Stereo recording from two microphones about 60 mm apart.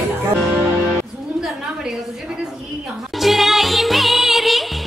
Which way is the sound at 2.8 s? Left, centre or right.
Centre.